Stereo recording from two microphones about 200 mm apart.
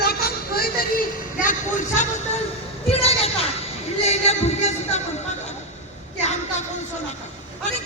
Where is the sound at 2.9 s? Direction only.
30° left (ahead or behind).